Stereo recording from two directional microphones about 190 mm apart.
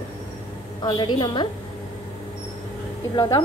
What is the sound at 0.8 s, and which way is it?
Speech, 20° left (ahead or behind).